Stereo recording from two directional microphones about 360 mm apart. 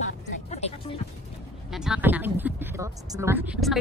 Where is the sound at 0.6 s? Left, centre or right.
Centre.